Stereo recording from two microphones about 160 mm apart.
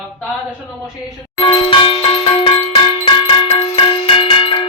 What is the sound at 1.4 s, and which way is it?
Music, 30° left (ahead or behind).